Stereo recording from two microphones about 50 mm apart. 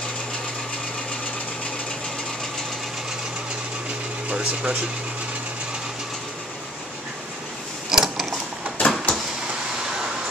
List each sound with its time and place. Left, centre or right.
4.3 s speech: centre
7.9 s mechanisms: centre
8.7 s a sound: left